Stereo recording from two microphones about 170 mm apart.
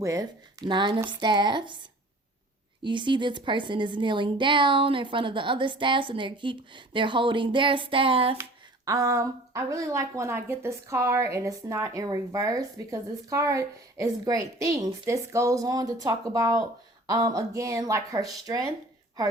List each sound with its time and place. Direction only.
0.0 s a woman's voice: 20° right (ahead or behind)
2.8 s a woman's voice: 30° right (ahead or behind)
8.4 s a woman's voice: 20° right (ahead or behind)